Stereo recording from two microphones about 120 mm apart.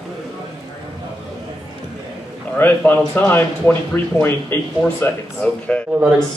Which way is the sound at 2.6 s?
15° left (ahead or behind).